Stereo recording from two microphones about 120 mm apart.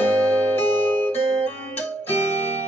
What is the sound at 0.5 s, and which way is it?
Music, 15° left (ahead or behind).